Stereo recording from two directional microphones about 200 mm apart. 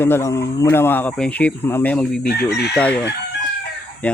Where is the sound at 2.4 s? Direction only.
55° left (ahead or behind).